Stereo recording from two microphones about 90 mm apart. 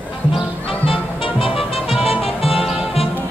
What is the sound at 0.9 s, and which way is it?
Music, 85° left.